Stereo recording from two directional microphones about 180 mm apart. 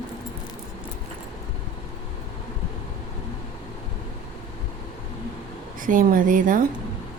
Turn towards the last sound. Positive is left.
turn(degrees=-45)  # may be behind; listen again after turning